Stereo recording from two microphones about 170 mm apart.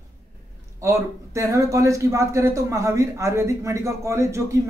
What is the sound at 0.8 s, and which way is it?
A man's voice, 15° right (ahead or behind).